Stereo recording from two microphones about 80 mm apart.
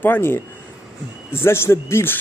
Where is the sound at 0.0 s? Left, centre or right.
Left.